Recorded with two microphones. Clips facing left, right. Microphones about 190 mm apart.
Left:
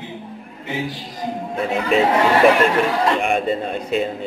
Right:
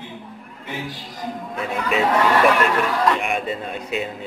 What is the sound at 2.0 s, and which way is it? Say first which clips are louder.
Speech: left 2 dB; 25° left (ahead or behind).